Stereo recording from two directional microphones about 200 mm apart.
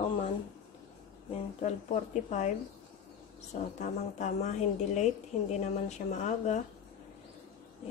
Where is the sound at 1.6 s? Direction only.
35° left (ahead or behind).